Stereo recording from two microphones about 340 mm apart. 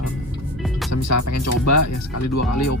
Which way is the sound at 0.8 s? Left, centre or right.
Left.